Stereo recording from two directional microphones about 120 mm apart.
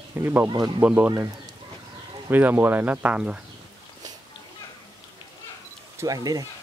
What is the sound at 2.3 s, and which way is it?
Speech, 15° right (ahead or behind).